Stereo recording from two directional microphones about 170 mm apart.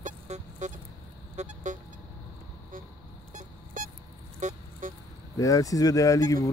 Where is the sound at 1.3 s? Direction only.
45° right (ahead or behind).